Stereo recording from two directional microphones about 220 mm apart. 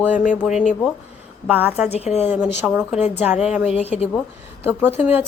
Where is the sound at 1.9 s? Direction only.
30° left (ahead or behind).